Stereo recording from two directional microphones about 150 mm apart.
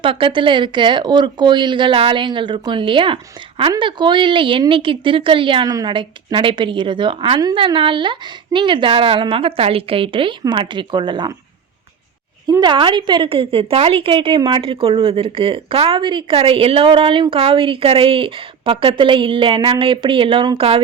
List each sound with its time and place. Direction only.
0.0 s a woman's voice: 35° right (ahead or behind)
12.5 s a woman's voice: 25° right (ahead or behind)